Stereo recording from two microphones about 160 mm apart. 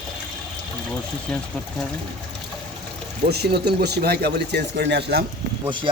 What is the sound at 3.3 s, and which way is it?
Speech, 90° right.